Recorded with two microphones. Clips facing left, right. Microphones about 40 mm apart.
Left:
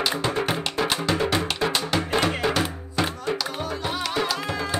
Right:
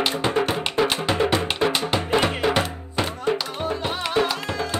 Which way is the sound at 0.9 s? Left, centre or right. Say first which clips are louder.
Right 2 dB; right.